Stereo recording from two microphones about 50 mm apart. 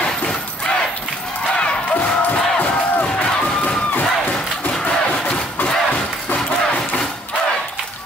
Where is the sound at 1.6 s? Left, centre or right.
Left.